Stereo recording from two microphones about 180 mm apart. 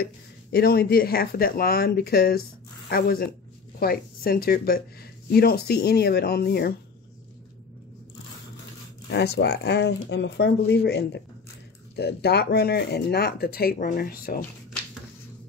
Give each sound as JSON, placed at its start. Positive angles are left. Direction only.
{"t": 0.5, "sound": "speech", "side_deg": 60}
{"t": 9.1, "sound": "speech", "side_deg": 65}